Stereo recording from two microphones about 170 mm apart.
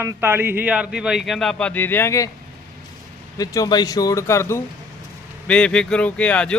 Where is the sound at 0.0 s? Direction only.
15° right (ahead or behind); by 2.3 s 15° left (ahead or behind).